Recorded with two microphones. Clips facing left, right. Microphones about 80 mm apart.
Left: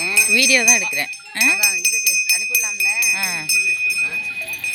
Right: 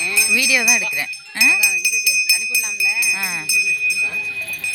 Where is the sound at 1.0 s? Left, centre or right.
Centre.